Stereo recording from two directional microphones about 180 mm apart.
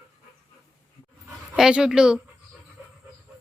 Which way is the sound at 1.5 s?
5° right (ahead or behind).